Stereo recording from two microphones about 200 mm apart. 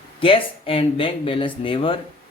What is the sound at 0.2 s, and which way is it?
A man's voice, 25° left (ahead or behind).